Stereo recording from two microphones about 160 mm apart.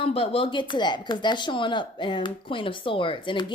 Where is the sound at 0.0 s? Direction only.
35° left (ahead or behind).